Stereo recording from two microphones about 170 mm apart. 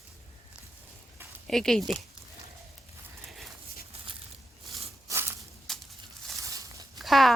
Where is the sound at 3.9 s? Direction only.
35° right (ahead or behind).